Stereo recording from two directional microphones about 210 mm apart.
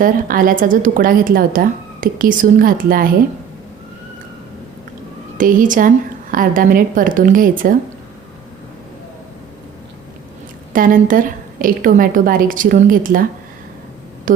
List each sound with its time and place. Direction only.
0.0 s speech: 40° right (ahead or behind)
5.4 s speech: 40° right (ahead or behind)
10.7 s speech: 40° right (ahead or behind)
14.3 s speech: 40° right (ahead or behind)